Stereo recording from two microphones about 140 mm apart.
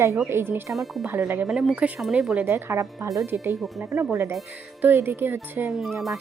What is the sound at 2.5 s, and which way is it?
A woman's voice, 20° right (ahead or behind).